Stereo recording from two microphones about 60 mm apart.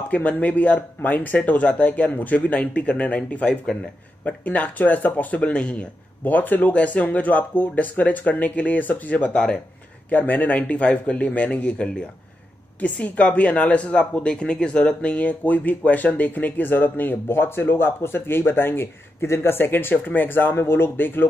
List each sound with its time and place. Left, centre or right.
0.1 s speech: left
10.0 s speech: left